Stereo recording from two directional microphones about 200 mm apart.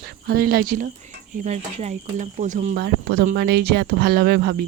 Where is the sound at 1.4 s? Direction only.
35° right (ahead or behind).